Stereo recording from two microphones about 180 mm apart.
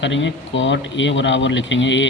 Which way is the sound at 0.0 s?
90° left.